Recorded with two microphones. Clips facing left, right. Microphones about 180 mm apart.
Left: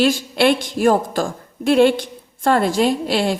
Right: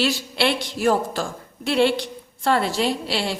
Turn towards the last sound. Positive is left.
turn(degrees=50)  # may be behind; listen again after turning